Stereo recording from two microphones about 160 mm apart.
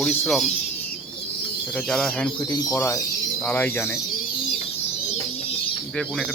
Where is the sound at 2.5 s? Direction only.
20° left (ahead or behind).